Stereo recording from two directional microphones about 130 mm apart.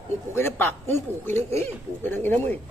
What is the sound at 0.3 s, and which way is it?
A man's voice, 15° left (ahead or behind).